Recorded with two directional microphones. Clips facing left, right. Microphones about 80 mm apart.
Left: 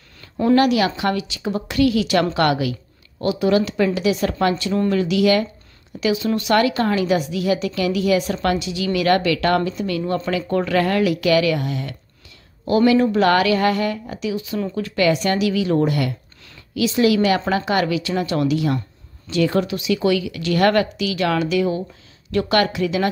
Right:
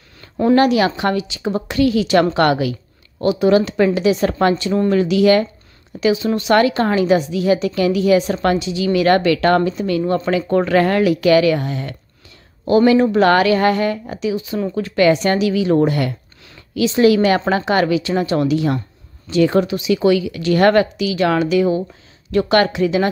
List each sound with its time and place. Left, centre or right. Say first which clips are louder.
0.4 s speech: right 2 dB; right
14.8 s speech: right 5 dB; right